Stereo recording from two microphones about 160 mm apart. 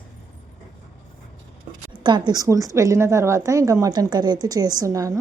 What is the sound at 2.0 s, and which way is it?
A woman's voice, 25° right (ahead or behind).